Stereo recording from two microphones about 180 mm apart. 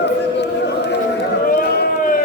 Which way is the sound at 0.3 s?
70° left (ahead or behind).